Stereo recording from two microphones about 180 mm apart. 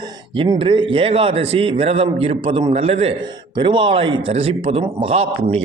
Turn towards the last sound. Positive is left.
turn(degrees=-35)  # may be behind; listen again after turning